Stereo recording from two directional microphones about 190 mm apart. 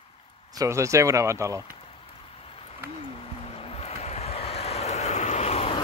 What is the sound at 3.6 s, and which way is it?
Vehicle, 30° left (ahead or behind).